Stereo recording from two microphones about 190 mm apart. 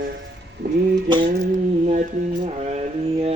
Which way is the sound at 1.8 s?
40° right (ahead or behind).